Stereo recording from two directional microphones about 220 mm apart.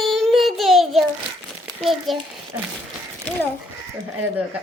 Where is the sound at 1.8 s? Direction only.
Centre (ahead or behind).